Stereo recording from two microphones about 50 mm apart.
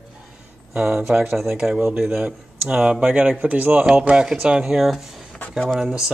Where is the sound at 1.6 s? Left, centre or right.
Centre.